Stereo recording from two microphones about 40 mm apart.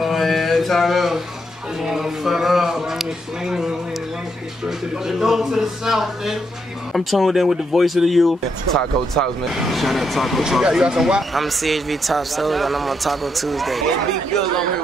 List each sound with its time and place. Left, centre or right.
0.0 s mantra: centre
1.8 s a man's voice: centre
8.7 s speech: centre
9.5 s speech: centre
10.6 s a man's voice: centre
11.3 s speech: centre